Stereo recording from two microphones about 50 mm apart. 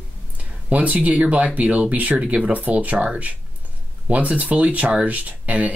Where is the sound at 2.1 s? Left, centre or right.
Centre.